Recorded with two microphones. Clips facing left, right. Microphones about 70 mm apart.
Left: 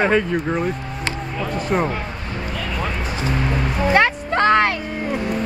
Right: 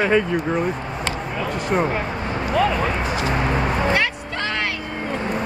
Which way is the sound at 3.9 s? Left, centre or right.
Left.